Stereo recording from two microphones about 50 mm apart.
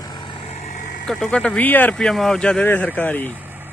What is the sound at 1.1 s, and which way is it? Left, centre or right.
Speech, centre.